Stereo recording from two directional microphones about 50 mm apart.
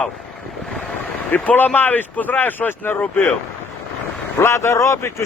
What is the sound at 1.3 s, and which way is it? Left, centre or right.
Speech, left.